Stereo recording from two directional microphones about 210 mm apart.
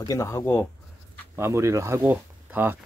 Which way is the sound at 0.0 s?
15° left (ahead or behind).